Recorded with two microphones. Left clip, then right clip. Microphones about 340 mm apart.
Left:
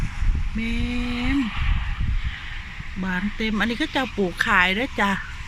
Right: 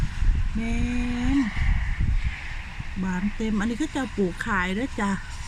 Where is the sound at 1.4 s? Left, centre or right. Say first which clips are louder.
Left 1 dB; right.